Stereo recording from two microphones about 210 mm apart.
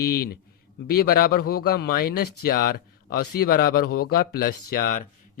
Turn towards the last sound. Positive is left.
turn(degrees=45)  # may be behind; listen again after turning